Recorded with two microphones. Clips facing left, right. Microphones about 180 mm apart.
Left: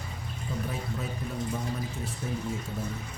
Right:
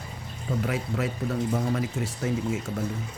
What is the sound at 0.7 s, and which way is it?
Speech, 90° right.